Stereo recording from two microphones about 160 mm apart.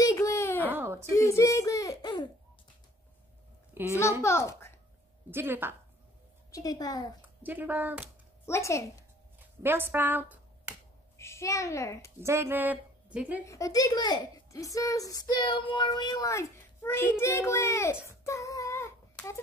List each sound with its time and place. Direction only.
0.0 s a sound: 20° left (ahead or behind)
0.7 s a sound: 15° right (ahead or behind)
1.1 s a child's voice: 20° left (ahead or behind)
3.7 s a child's voice: 15° right (ahead or behind)
4.2 s a child's voice: 15° left (ahead or behind)
5.3 s a woman's voice: 15° right (ahead or behind)
6.5 s a child's voice: 20° left (ahead or behind)
7.2 s speech: 10° right (ahead or behind)
8.5 s a woman's voice: 20° left (ahead or behind)
9.6 s speech: 15° right (ahead or behind)
11.1 s a child's voice: 15° left (ahead or behind)
12.2 s speech: 15° right (ahead or behind)
13.5 s a child's voice: 20° left (ahead or behind)
18.2 s child singing: 20° left (ahead or behind)